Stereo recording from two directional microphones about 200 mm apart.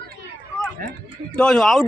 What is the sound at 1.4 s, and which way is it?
Speech, centre (ahead or behind).